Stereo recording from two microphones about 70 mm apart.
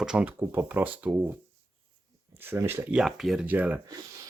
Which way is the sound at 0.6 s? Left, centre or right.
Right.